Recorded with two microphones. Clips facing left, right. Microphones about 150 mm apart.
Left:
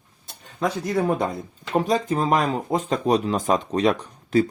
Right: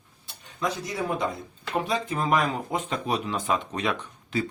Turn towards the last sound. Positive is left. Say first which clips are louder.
# left 9 dB
turn(degrees=40)  # may be behind; listen again after turning